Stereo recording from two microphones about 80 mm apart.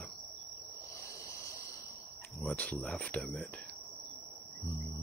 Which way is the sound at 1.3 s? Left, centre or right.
Left.